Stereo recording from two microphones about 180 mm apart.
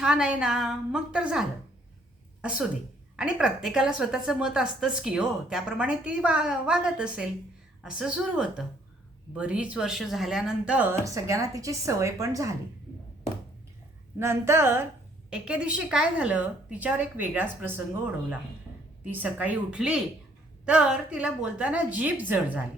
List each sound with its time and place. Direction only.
0.0 s a woman's voice: 5° right (ahead or behind)
11.0 s a woman's voice: 15° right (ahead or behind)
14.2 s a woman's voice: 15° right (ahead or behind)